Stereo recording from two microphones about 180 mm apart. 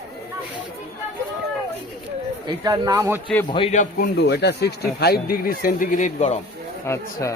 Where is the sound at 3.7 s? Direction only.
55° left (ahead or behind); by 6.4 s 40° left (ahead or behind).